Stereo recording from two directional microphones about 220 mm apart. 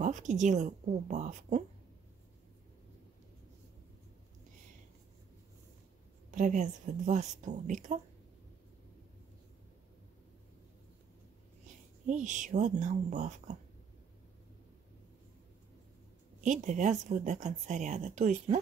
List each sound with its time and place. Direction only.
0.0 s speech: 35° right (ahead or behind)
6.3 s speech: 35° right (ahead or behind)
12.1 s speech: 35° right (ahead or behind)
16.4 s speech: 35° right (ahead or behind)